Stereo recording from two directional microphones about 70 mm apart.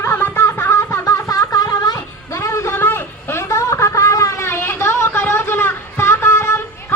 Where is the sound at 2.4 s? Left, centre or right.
Left.